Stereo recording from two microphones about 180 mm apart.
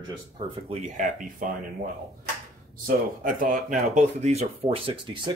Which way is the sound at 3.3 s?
45° right (ahead or behind).